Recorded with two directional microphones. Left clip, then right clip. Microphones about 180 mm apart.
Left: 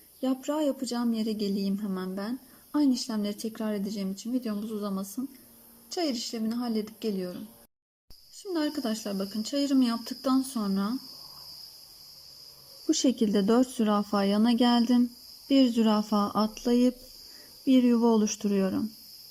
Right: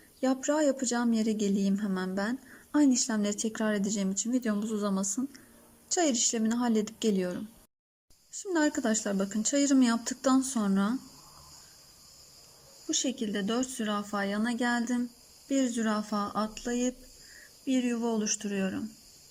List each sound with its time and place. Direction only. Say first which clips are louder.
0.2 s speech: right 2 dB; 5° left (ahead or behind)
8.4 s speech: right 2 dB; centre (ahead or behind)
12.9 s speech: left 6 dB; 30° left (ahead or behind)
15.8 s speech: left 5 dB; 15° left (ahead or behind)